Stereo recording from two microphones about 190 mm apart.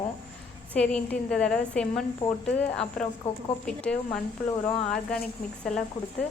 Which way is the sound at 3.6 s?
5° left (ahead or behind).